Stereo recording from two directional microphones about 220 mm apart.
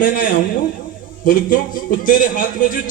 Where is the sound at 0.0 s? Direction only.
40° left (ahead or behind).